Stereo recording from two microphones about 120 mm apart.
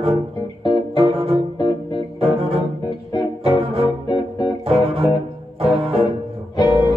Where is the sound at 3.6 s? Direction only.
55° right (ahead or behind).